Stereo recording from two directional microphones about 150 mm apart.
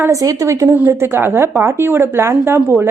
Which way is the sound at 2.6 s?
5° right (ahead or behind).